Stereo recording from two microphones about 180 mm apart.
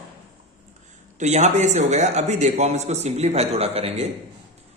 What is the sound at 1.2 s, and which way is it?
A man's voice, 40° right (ahead or behind).